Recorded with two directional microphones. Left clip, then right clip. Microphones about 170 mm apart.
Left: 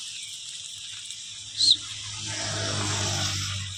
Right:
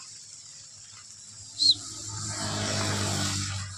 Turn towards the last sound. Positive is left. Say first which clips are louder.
# left 2 dB
turn(degrees=45)  # may be behind; listen again after turning